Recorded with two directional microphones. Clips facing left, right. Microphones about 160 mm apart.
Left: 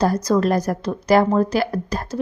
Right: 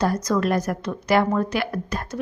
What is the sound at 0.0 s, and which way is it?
A woman's voice, 35° left (ahead or behind).